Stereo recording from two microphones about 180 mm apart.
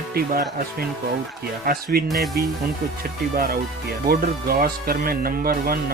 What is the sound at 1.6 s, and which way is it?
Speech, 55° right (ahead or behind).